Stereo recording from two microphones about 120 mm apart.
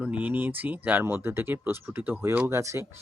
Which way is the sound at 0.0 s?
10° right (ahead or behind).